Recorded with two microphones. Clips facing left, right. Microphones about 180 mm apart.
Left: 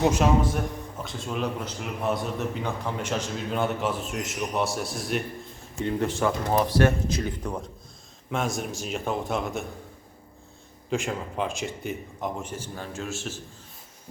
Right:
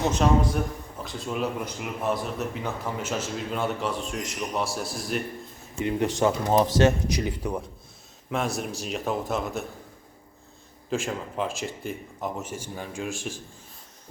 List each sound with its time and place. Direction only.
0.1 s a man's voice: 5° left (ahead or behind)
5.8 s speech: 15° right (ahead or behind)
8.3 s a man's voice: centre (ahead or behind)
10.8 s speech: centre (ahead or behind)